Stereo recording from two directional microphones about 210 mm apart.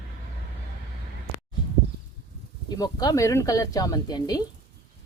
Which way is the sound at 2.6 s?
20° left (ahead or behind).